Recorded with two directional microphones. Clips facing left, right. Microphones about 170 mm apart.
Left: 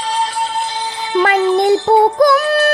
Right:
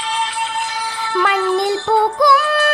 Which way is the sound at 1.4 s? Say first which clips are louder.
Left 5 dB; 20° left (ahead or behind).